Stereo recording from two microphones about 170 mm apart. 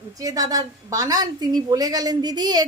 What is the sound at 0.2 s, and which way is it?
A woman's voice, 20° right (ahead or behind).